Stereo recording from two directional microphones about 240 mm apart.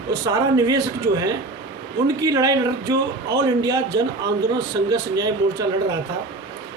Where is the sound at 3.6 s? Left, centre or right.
Centre.